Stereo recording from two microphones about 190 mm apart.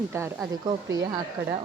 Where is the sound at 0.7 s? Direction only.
20° right (ahead or behind).